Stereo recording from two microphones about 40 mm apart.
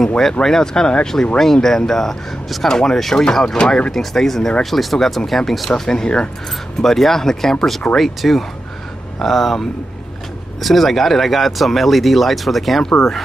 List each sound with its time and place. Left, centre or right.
0.3 s speech: centre
5.9 s speech: centre